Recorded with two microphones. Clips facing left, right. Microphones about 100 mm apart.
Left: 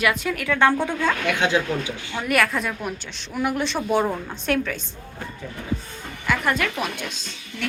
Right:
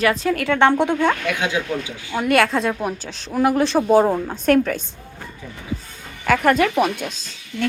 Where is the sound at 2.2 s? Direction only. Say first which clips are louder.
Right 5 dB; 30° right (ahead or behind).